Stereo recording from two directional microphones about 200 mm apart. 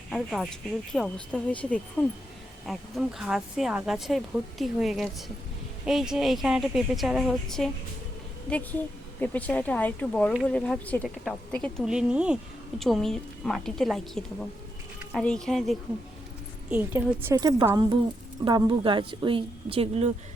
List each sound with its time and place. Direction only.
0.1 s a woman's voice: centre (ahead or behind); by 19.9 s 30° right (ahead or behind)